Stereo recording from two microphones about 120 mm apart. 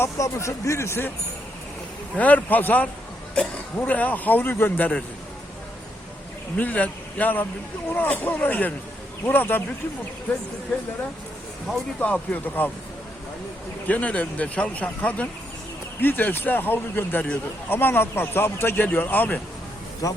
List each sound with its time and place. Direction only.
0.0 s speech: 25° left (ahead or behind)
2.1 s a man's voice: 10° left (ahead or behind)
6.6 s a man's voice: 10° left (ahead or behind)
11.9 s a man's voice: 10° left (ahead or behind)
13.8 s a man's voice: 10° left (ahead or behind)
20.0 s speech: 30° left (ahead or behind)